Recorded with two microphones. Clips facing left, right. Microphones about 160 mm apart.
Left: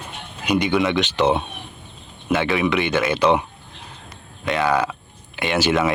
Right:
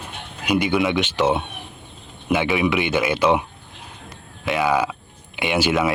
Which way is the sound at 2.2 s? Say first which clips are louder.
Even; 15° right (ahead or behind).